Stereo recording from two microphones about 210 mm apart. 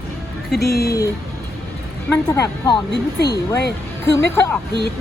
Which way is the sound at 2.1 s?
15° left (ahead or behind).